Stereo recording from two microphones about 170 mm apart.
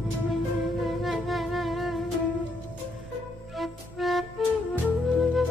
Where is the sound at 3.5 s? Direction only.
Centre (ahead or behind).